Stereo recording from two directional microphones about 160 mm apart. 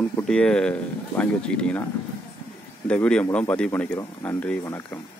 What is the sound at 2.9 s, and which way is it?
Speech, 5° left (ahead or behind).